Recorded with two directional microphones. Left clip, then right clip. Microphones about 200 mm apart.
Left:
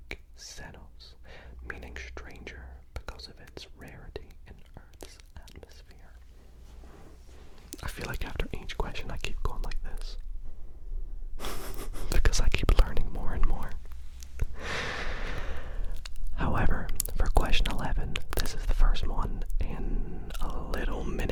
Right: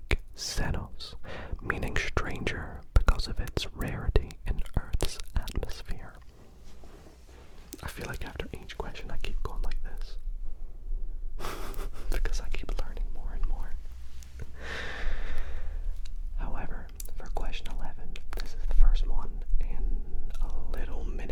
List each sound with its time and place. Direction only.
0.1 s whispering: 50° right (ahead or behind)
7.7 s whispering: 10° left (ahead or behind)
12.0 s whispering: 45° left (ahead or behind)
14.3 s sigh: 35° left (ahead or behind)
16.0 s whispering: 60° left (ahead or behind)